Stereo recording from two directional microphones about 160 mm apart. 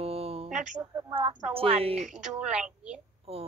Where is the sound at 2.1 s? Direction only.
5° right (ahead or behind).